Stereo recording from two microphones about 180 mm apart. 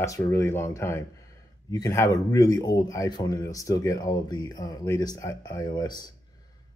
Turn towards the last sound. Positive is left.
turn(degrees=25)  # may be behind; listen again after turning